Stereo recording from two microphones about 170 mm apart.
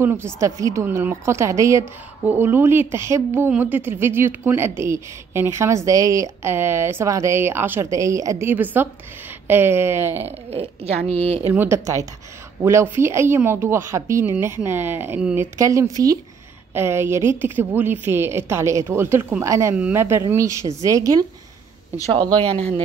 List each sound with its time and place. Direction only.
0.0 s a woman's voice: 15° right (ahead or behind)
10.5 s a woman's voice: 35° right (ahead or behind)
11.5 s a woman's voice: 15° right (ahead or behind)
22.6 s a woman's voice: 35° right (ahead or behind)